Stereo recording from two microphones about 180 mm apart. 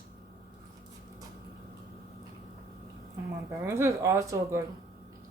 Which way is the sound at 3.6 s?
15° right (ahead or behind).